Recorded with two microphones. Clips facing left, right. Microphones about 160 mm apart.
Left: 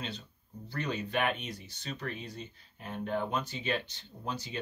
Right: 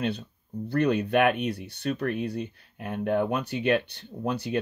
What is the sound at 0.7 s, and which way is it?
Speech, 60° right (ahead or behind).